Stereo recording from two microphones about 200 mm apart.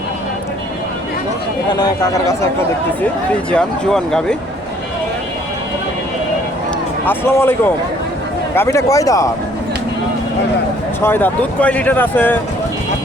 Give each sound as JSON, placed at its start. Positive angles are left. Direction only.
{"t": 1.7, "sound": "speech", "side_deg": 20}
{"t": 3.5, "sound": "speech", "side_deg": 5}
{"t": 7.0, "sound": "speech", "side_deg": 10}
{"t": 11.0, "sound": "speech", "side_deg": 10}